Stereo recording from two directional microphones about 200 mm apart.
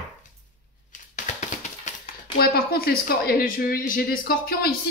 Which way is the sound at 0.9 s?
40° left (ahead or behind).